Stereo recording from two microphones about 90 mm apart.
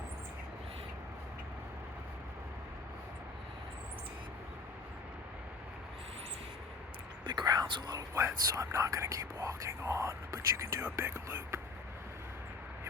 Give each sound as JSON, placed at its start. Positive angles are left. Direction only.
{"t": 7.3, "sound": "speech", "side_deg": -50}
{"t": 8.1, "sound": "speech", "side_deg": -30}